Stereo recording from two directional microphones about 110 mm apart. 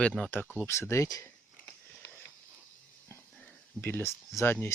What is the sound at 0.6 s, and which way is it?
Speech, 25° left (ahead or behind).